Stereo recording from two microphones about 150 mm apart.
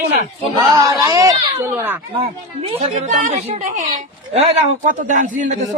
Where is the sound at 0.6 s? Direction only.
25° right (ahead or behind).